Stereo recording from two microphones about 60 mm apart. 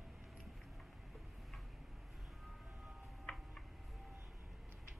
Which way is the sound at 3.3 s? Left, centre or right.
Left.